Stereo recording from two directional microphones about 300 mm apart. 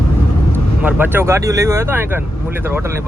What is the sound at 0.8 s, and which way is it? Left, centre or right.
Speech, centre.